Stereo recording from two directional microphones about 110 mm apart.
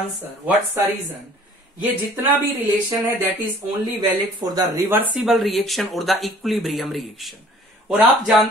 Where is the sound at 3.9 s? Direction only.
35° right (ahead or behind).